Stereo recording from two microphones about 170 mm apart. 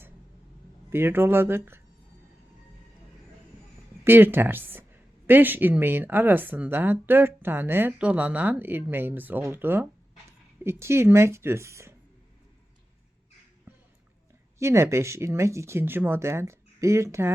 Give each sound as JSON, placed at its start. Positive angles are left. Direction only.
{"t": 0.9, "sound": "speech", "side_deg": -15}
{"t": 4.0, "sound": "speech", "side_deg": -10}
{"t": 13.7, "sound": "a sound", "side_deg": -15}
{"t": 14.6, "sound": "speech", "side_deg": -15}